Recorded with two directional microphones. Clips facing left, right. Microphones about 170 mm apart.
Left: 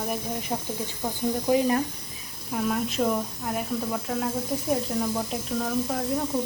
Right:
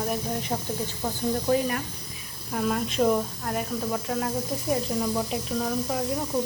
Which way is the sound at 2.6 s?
Centre (ahead or behind).